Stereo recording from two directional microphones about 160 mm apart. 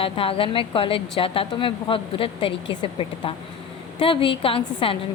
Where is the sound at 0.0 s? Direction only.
35° left (ahead or behind).